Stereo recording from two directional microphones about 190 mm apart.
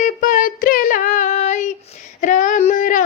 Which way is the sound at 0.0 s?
45° left (ahead or behind).